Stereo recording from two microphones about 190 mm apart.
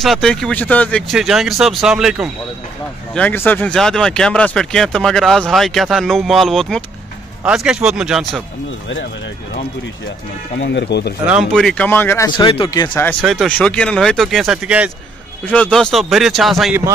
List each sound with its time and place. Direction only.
0.0 s speech: centre (ahead or behind)
3.2 s speech: 10° left (ahead or behind)
10.6 s speech: 70° left (ahead or behind)
11.2 s speech: centre (ahead or behind)
12.4 s speech: 25° left (ahead or behind)
13.2 s speech: centre (ahead or behind)
15.4 s speech: 10° left (ahead or behind)